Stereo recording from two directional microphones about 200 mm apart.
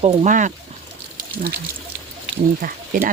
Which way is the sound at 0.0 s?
30° right (ahead or behind).